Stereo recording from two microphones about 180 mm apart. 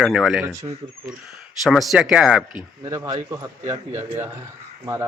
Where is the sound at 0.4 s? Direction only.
15° right (ahead or behind).